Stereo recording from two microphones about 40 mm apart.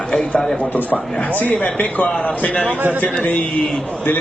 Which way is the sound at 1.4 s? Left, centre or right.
Left.